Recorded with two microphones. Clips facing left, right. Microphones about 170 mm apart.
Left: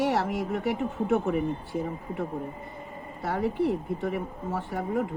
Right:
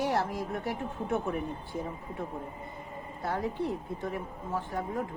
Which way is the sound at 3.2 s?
70° left (ahead or behind).